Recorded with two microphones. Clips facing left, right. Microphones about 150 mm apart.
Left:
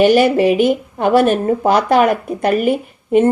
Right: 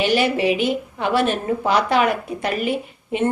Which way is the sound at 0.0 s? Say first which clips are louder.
Left 8 dB; 45° left (ahead or behind).